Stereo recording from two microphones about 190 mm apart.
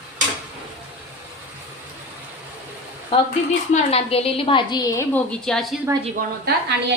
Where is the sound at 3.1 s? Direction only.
25° left (ahead or behind).